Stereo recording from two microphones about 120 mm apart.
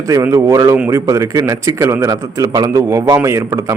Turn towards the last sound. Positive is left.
turn(degrees=-25)  # may be behind; listen again after turning